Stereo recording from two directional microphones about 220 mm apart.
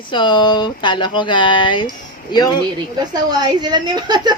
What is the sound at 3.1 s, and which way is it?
A woman's voice, 20° right (ahead or behind).